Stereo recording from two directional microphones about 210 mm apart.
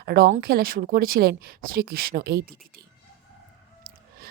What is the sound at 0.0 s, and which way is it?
A woman's voice, 50° right (ahead or behind).